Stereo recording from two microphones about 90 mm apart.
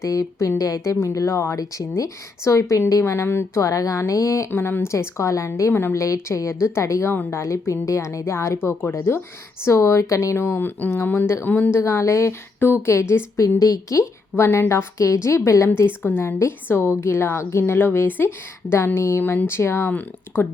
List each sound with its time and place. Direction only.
0.0 s a woman's voice: 35° left (ahead or behind); by 11.8 s 20° left (ahead or behind)
11.8 s a woman's voice: 35° left (ahead or behind)
15.8 s a woman's voice: 25° left (ahead or behind)